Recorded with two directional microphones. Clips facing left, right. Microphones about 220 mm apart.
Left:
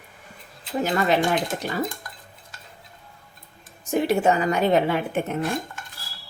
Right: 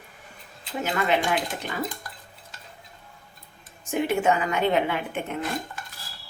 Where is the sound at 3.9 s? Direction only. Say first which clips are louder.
Left 3 dB; 35° left (ahead or behind).